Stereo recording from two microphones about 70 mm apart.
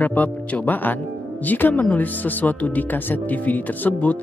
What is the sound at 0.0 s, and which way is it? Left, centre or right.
Speech, left.